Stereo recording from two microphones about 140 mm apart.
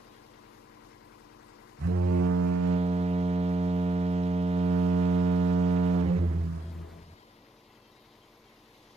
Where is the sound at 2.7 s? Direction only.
50° right (ahead or behind).